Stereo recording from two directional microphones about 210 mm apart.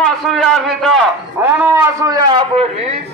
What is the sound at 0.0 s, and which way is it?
Speech, centre (ahead or behind).